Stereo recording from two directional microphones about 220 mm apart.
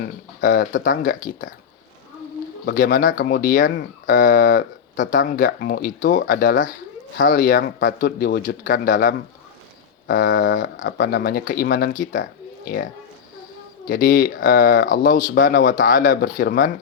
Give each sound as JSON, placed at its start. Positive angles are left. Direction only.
{"t": 0.0, "sound": "speech", "side_deg": 40}
{"t": 2.6, "sound": "speech", "side_deg": 40}
{"t": 12.2, "sound": "a sound", "side_deg": 45}
{"t": 13.8, "sound": "speech", "side_deg": 40}